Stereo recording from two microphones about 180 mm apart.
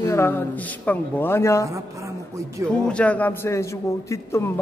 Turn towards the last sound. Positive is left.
turn(degrees=15)  # may be behind; listen again after turning